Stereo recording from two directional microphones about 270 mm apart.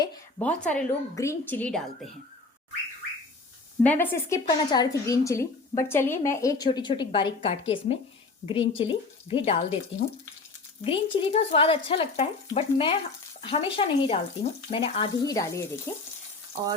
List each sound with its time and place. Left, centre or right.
0.0 s a woman's voice: centre
3.8 s a woman's voice: centre
10.8 s a woman's voice: centre